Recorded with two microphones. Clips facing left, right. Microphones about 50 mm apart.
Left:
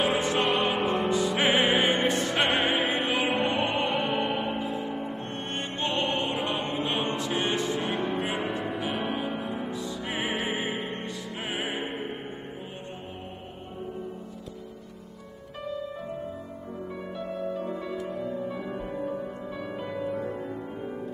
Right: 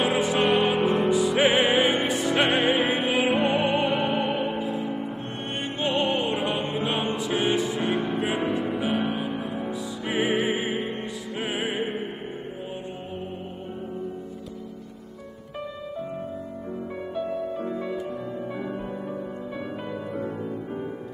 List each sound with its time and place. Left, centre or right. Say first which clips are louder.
0.2 s music: right 4 dB; centre
17.7 s music: right 3 dB; centre
18.8 s music: even; centre